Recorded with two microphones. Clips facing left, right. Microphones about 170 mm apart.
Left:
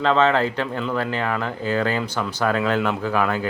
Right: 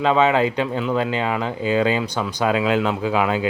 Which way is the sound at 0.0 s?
15° right (ahead or behind).